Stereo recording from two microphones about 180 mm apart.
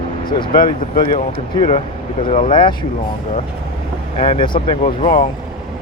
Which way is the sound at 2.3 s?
40° left (ahead or behind).